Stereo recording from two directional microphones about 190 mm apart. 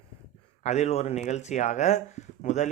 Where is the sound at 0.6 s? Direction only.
35° left (ahead or behind).